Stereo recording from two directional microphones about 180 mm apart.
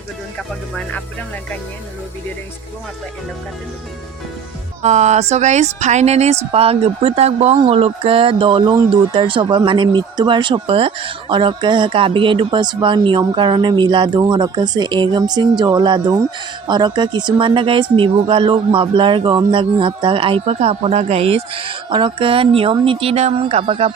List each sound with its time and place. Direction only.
4.8 s speech: 40° right (ahead or behind)